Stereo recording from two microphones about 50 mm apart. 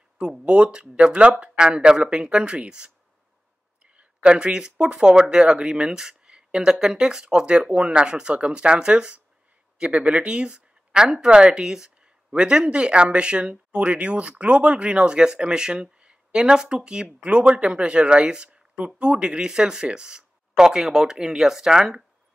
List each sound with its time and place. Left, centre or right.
0.2 s speech: centre